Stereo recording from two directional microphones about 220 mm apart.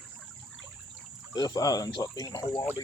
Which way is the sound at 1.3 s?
15° left (ahead or behind).